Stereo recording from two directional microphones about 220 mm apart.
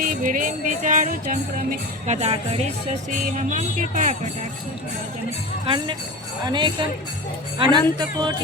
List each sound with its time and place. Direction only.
0.0 s music: 40° right (ahead or behind)
2.0 s jingle bell: 30° right (ahead or behind)
2.8 s music: 35° right (ahead or behind)
5.6 s jingle bell: 20° right (ahead or behind)